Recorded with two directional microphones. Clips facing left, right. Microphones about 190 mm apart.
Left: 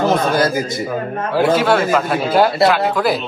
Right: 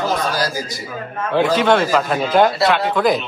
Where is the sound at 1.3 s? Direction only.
5° left (ahead or behind).